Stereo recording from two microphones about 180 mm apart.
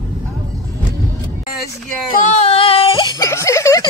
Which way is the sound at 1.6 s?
45° left (ahead or behind).